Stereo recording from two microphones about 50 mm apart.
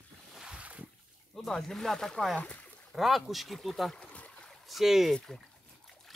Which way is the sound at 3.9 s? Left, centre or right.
Left.